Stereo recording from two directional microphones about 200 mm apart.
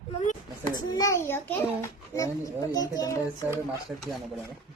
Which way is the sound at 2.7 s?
20° left (ahead or behind).